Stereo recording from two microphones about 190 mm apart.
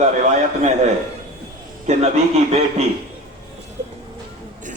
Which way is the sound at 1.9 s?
35° right (ahead or behind).